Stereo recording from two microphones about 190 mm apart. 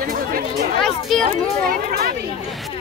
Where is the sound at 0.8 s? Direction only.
Centre (ahead or behind).